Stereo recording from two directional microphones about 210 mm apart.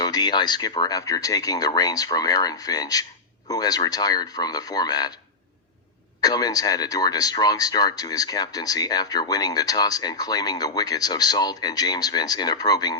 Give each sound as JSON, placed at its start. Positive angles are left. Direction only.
{"t": 0.0, "sound": "speech", "side_deg": 20}
{"t": 6.2, "sound": "speech", "side_deg": 20}